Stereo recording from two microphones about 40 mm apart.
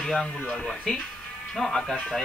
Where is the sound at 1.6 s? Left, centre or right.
Centre.